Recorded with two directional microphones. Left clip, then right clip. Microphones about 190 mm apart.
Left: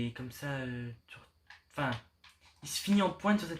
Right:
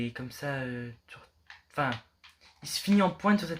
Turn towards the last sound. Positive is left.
turn(degrees=-25)  # may be behind; listen again after turning